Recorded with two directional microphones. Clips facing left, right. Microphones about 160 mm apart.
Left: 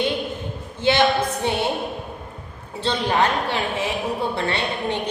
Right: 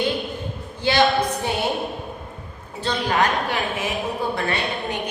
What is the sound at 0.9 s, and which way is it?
Speech, 20° left (ahead or behind).